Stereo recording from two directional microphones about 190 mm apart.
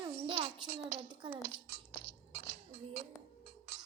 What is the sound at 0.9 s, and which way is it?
Speech, 25° right (ahead or behind).